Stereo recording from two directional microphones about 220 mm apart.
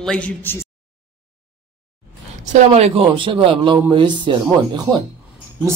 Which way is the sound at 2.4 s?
30° right (ahead or behind).